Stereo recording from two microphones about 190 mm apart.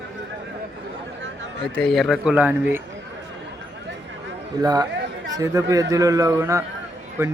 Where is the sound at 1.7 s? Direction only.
Centre (ahead or behind).